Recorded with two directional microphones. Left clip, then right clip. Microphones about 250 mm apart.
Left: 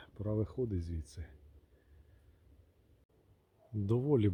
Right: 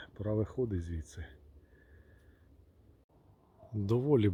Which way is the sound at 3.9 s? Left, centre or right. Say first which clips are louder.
Right 3 dB; centre.